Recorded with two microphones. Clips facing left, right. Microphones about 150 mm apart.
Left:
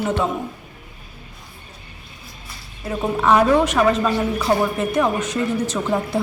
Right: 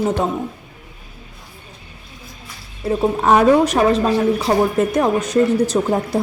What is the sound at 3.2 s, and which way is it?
Speech, 40° right (ahead or behind).